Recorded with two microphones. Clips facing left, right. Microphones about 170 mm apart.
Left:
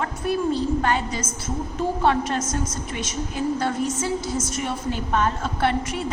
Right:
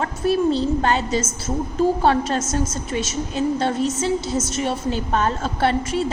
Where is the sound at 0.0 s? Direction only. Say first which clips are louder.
Right 4 dB; 30° right (ahead or behind).